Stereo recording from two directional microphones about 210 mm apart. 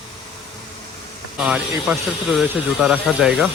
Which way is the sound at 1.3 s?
5° right (ahead or behind).